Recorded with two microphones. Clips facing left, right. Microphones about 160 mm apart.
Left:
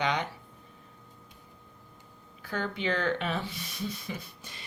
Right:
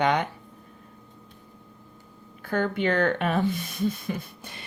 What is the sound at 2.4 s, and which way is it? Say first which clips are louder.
Speech: right 8 dB; 55° right (ahead or behind).